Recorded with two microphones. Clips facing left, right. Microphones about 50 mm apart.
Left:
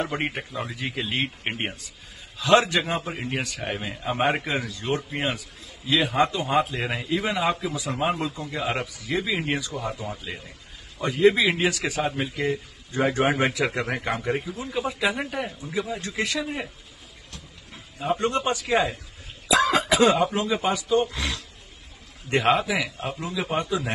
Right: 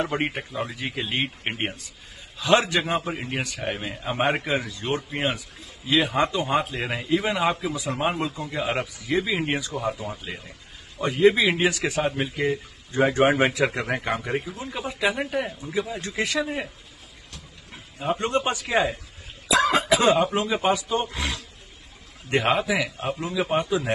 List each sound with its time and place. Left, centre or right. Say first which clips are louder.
0.0 s a man's voice: right 2 dB; centre
17.9 s speech: even; centre
18.2 s speech: even; centre
18.7 s a man's voice: right 1 dB; centre